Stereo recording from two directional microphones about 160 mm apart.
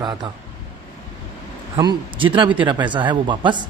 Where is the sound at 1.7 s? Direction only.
30° right (ahead or behind).